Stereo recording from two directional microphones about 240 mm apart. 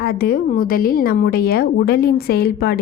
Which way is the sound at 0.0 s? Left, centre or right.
Left.